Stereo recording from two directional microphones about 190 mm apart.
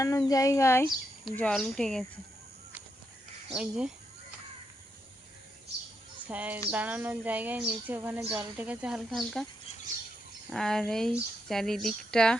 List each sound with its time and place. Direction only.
0.3 s speech: 15° left (ahead or behind)
1.2 s speech: 5° left (ahead or behind)
3.5 s speech: 5° right (ahead or behind)
6.2 s speech: 10° right (ahead or behind)
10.5 s speech: 5° left (ahead or behind)